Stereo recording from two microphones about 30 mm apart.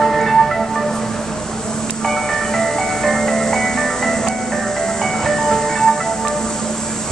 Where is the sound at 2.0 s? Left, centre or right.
Centre.